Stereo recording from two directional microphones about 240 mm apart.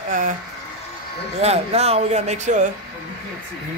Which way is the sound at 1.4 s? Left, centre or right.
Right.